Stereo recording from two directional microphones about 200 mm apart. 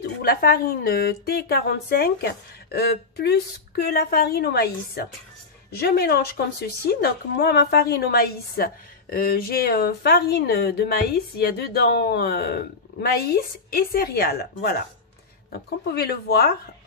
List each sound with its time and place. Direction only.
0.0 s a woman's voice: 50° left (ahead or behind)